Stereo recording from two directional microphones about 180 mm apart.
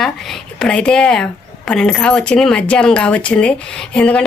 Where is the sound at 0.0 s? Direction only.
5° left (ahead or behind).